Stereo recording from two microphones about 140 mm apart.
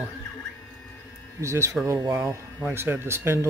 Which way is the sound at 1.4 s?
20° right (ahead or behind).